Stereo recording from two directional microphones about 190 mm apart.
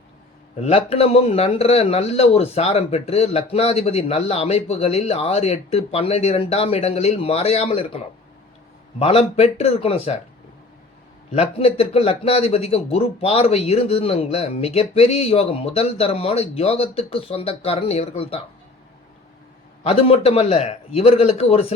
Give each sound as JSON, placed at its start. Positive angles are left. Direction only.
{"t": 0.6, "sound": "speech", "side_deg": 30}
{"t": 11.3, "sound": "speech", "side_deg": 30}
{"t": 19.8, "sound": "speech", "side_deg": 30}